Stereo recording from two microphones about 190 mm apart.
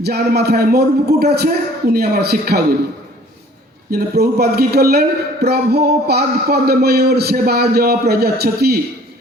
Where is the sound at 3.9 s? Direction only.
55° right (ahead or behind).